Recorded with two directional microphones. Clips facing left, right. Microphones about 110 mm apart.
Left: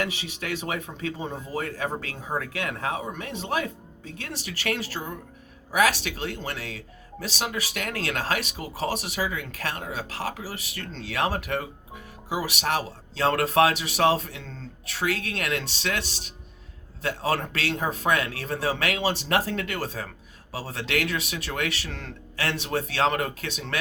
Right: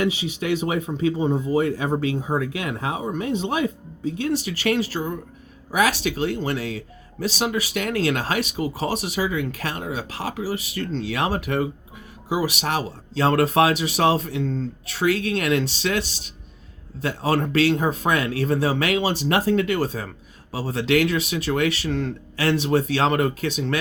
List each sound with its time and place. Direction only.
0.0 s speech: 20° right (ahead or behind)
6.0 s speech: 25° right (ahead or behind)
17.2 s speech: 20° right (ahead or behind)